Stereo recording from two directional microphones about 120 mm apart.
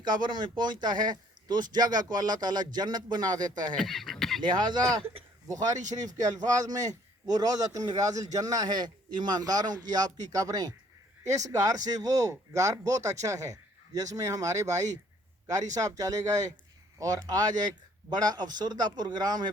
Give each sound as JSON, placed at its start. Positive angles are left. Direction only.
{"t": 0.0, "sound": "a man's voice", "side_deg": -40}
{"t": 3.8, "sound": "speech", "side_deg": 0}
{"t": 4.7, "sound": "a man's voice", "side_deg": -35}